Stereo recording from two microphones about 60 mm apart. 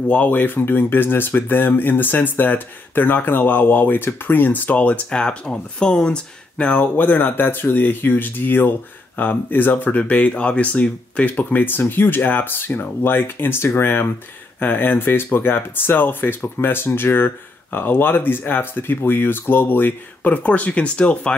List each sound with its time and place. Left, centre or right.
0.1 s speech: left